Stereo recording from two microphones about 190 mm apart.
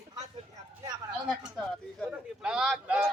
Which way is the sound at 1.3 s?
5° right (ahead or behind).